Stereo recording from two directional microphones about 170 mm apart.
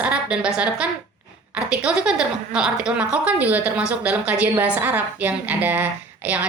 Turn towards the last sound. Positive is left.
turn(degrees=-10)  # may be behind; listen again after turning